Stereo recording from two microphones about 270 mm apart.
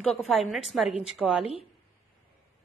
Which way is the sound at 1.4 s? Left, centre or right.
Left.